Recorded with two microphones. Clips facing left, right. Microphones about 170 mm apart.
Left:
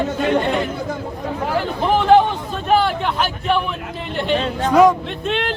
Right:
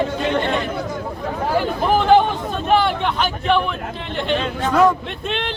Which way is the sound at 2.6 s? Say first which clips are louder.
Left 1 dB; centre (ahead or behind).